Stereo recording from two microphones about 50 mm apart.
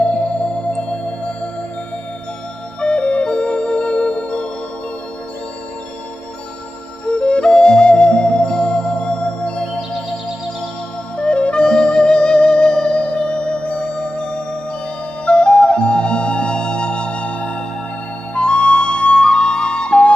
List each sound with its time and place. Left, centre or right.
0.0 s music: left
2.8 s music: left
7.1 s music: left
11.3 s music: left
18.3 s flute: centre